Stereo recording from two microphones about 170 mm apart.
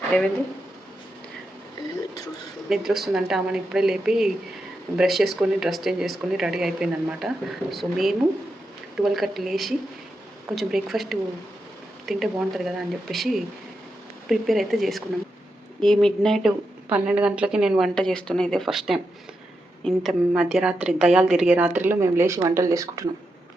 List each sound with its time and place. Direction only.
0.1 s speech: 10° left (ahead or behind)
2.6 s speech: centre (ahead or behind); by 23.0 s 20° right (ahead or behind)